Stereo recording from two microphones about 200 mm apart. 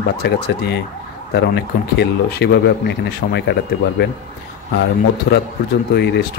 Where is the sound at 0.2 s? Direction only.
55° left (ahead or behind).